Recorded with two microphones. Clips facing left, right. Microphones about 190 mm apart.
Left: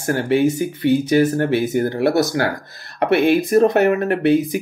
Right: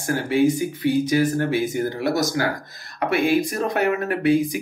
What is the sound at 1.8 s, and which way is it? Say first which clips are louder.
Speech: left 5 dB; 65° left (ahead or behind).